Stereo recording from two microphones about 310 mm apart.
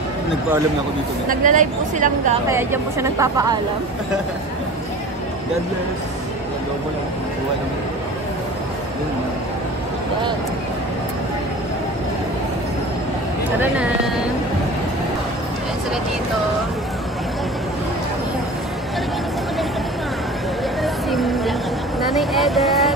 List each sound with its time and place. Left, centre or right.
1.3 s speech: right
2.5 s a woman's voice: centre
20.8 s a sound: centre
22.1 s speech: centre